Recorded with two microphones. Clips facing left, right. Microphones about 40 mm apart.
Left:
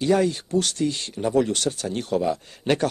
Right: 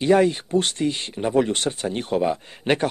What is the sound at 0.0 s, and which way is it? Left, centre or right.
Speech, right.